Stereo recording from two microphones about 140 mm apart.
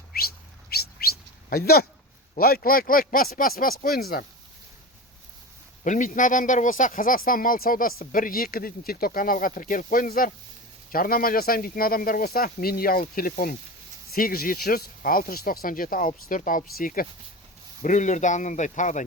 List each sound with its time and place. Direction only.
0.1 s bird: 90° left
2.3 s speech: 90° left
5.8 s a man's voice: 65° left (ahead or behind); by 17.1 s 85° left
17.8 s speech: 60° left (ahead or behind)